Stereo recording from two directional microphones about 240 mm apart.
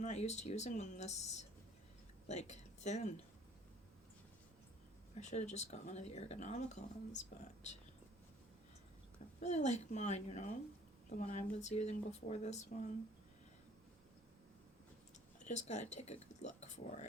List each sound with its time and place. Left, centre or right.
0.0 s speech: left
5.2 s speech: left
9.4 s speech: left
15.4 s speech: left